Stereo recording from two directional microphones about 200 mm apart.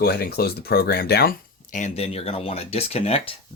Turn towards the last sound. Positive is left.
turn(degrees=30)  # may be behind; listen again after turning